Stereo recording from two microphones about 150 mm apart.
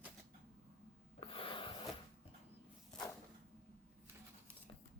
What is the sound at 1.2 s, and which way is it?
Snort, 35° left (ahead or behind).